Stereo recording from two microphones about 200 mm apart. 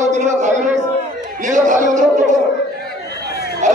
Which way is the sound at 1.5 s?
40° right (ahead or behind).